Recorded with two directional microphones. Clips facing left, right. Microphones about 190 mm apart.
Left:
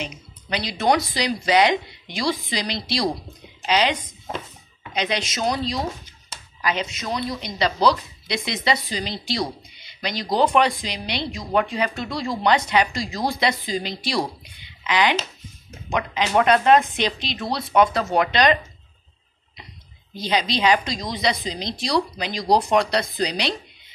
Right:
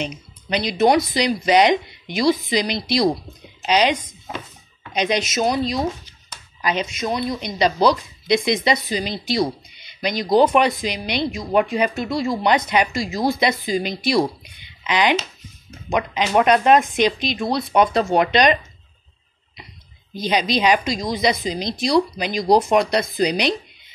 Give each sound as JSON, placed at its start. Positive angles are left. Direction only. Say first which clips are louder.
{"t": 0.0, "sound": "speech", "louder": "right 5 dB", "side_deg": -20}
{"t": 4.9, "sound": "speech", "louder": "right 5 dB", "side_deg": -15}
{"t": 20.2, "sound": "speech", "louder": "right 3 dB", "side_deg": -15}